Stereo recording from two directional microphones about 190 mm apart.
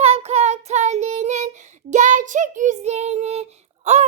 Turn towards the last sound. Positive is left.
turn(degrees=-35)  # may be behind; listen again after turning